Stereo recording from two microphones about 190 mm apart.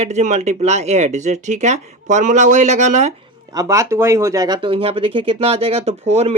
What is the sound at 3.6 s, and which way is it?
Speech, 15° right (ahead or behind).